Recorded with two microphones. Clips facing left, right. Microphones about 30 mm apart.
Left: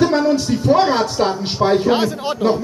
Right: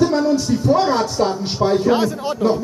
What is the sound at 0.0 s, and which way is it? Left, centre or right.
Speech, left.